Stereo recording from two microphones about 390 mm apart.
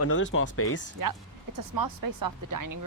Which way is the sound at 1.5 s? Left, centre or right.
Right.